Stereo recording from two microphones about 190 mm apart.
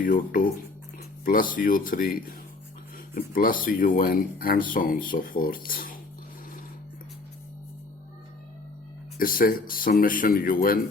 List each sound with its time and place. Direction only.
0.0 s speech: 45° left (ahead or behind)
9.1 s speech: 50° left (ahead or behind)